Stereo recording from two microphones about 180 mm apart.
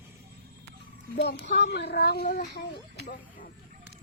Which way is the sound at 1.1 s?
70° left (ahead or behind).